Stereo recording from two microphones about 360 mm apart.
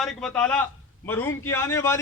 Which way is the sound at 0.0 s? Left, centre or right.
Centre.